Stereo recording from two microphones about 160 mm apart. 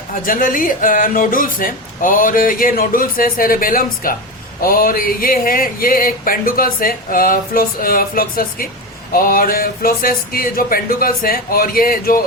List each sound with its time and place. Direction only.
0.1 s speech: 60° left (ahead or behind)